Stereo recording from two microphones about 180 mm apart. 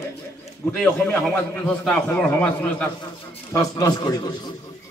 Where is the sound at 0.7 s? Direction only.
5° left (ahead or behind).